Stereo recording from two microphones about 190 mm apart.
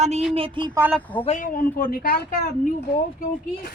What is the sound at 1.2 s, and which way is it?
Speech, 40° left (ahead or behind).